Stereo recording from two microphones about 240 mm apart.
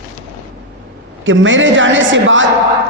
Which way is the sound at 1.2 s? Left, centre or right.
Right.